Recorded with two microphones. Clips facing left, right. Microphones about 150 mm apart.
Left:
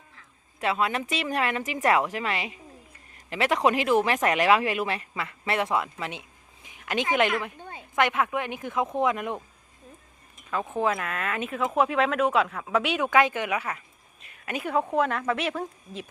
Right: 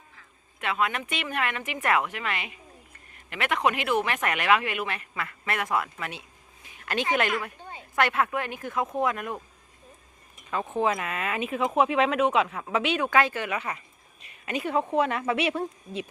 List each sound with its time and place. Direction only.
0.6 s a woman's voice: 30° left (ahead or behind)
10.5 s speech: centre (ahead or behind)
13.7 s speech: centre (ahead or behind)